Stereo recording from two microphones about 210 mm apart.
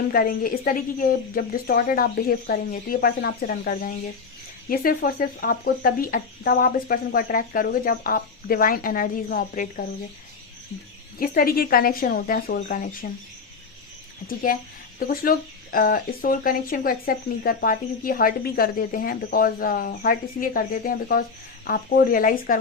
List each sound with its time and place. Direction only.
0.1 s a woman's voice: 45° left (ahead or behind)
11.2 s a woman's voice: 45° left (ahead or behind)
14.3 s a woman's voice: 45° left (ahead or behind)